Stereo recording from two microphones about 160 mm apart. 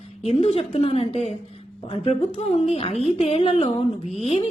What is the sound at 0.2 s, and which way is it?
A woman's voice, 40° left (ahead or behind).